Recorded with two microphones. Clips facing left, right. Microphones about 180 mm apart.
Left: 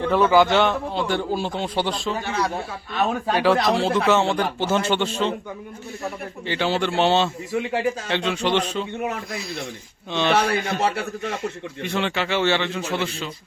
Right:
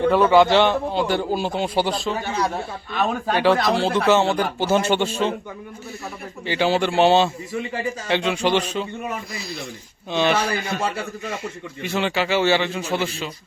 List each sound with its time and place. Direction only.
0.0 s a man's voice: centre (ahead or behind)
6.5 s a man's voice: 10° right (ahead or behind)
7.5 s a man's voice: 75° left (ahead or behind)
8.1 s a man's voice: 15° right (ahead or behind)
10.1 s a man's voice: 10° right (ahead or behind)
10.8 s a man's voice: 65° left (ahead or behind)
11.8 s a man's voice: 5° right (ahead or behind)